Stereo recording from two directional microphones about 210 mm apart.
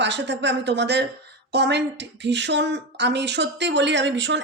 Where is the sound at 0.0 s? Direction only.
55° right (ahead or behind).